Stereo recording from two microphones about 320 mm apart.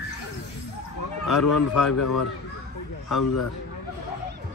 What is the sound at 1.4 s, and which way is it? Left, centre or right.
Speech, left.